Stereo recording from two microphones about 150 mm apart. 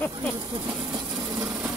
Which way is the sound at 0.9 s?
15° right (ahead or behind).